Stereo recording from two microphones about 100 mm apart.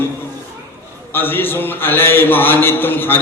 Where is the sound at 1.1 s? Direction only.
20° left (ahead or behind).